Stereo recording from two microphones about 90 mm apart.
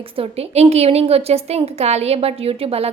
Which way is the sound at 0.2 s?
90° right.